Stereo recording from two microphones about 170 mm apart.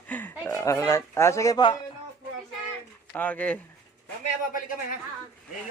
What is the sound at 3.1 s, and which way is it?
Speech, 10° left (ahead or behind).